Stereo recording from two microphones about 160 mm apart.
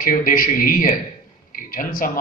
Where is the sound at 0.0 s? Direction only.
60° left (ahead or behind).